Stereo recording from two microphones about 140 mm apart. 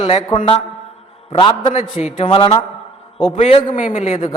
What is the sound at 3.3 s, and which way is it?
Speech, 50° left (ahead or behind).